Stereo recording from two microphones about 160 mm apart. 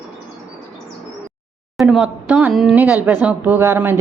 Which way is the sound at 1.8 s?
Centre (ahead or behind).